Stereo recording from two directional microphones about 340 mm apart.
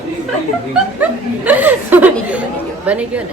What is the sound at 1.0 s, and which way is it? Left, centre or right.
Speech, centre.